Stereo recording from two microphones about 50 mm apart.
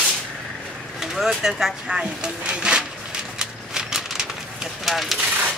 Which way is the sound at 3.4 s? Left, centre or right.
Centre.